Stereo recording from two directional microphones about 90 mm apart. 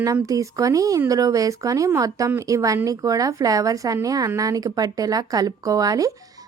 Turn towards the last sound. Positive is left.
turn(degrees=-40)  # may be behind; listen again after turning